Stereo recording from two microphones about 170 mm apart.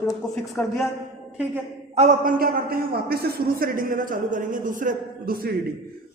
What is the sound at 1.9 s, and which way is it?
A man's voice, 45° right (ahead or behind).